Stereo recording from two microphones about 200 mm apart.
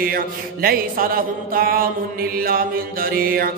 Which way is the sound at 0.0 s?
45° right (ahead or behind).